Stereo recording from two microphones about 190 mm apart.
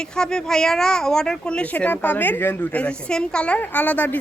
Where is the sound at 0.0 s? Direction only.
5° left (ahead or behind).